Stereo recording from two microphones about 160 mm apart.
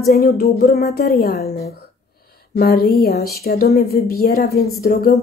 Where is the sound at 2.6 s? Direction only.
75° left (ahead or behind).